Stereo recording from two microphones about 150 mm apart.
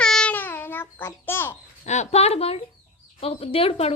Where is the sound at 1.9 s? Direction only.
45° left (ahead or behind).